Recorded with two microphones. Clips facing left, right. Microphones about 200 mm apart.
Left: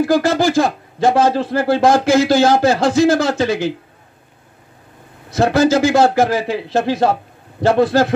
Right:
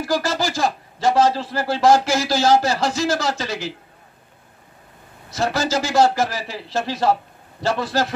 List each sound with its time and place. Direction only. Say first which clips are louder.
0.0 s a man's voice: left 8 dB; 55° left (ahead or behind)
5.3 s a man's voice: left 8 dB; 55° left (ahead or behind)